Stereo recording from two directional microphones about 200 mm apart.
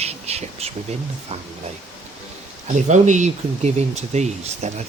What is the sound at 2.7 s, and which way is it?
Speech, 35° right (ahead or behind).